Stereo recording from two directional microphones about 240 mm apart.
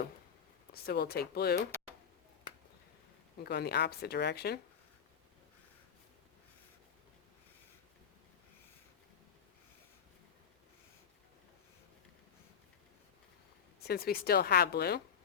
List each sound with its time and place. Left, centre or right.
0.7 s speech: left
3.4 s speech: left
13.8 s speech: left